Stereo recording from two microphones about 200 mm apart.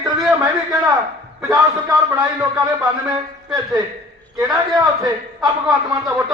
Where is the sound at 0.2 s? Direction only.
10° right (ahead or behind).